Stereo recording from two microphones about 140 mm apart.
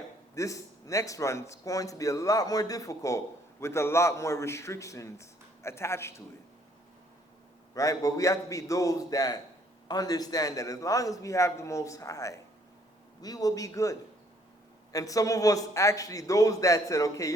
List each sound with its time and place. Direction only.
0.3 s a man's voice: 25° left (ahead or behind)
7.7 s a man's voice: 25° left (ahead or behind)
14.9 s a man's voice: 25° left (ahead or behind)